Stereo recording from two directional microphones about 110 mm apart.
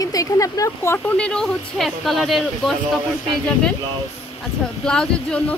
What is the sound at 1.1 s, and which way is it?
Speech, 10° left (ahead or behind).